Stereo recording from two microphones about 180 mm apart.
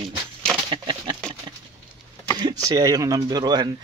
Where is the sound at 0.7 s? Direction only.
25° right (ahead or behind).